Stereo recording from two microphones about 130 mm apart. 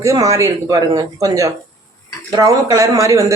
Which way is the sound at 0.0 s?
25° right (ahead or behind).